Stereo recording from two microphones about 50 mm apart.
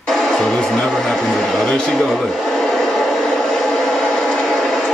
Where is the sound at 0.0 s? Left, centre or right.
Centre.